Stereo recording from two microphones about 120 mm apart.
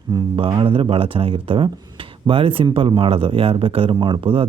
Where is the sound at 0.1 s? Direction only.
45° right (ahead or behind).